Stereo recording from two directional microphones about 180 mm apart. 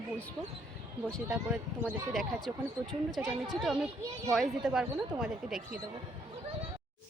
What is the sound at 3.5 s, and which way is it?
Speech, centre (ahead or behind).